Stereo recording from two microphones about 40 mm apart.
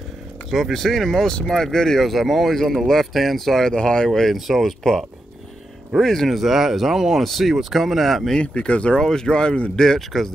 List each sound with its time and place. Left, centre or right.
0.5 s speech: centre
2.0 s speech: centre
3.7 s speech: centre
4.5 s speech: centre
5.9 s speech: centre
6.3 s speech: centre
8.4 s speech: left
9.0 s speech: centre